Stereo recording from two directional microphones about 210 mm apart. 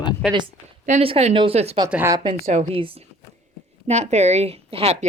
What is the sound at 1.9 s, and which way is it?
Speech, 10° right (ahead or behind).